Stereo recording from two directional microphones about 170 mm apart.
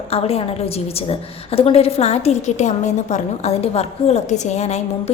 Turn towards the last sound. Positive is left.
turn(degrees=40)  # may be behind; listen again after turning